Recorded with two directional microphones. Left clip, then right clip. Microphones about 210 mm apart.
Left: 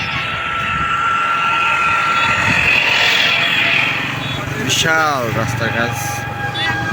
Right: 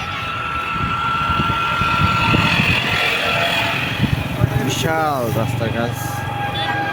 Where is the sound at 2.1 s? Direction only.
40° right (ahead or behind).